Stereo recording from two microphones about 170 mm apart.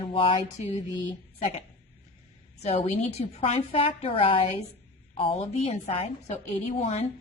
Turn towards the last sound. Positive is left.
turn(degrees=35)  # may be behind; listen again after turning